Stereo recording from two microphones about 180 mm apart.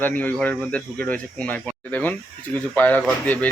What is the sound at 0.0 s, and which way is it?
Speech, 10° left (ahead or behind).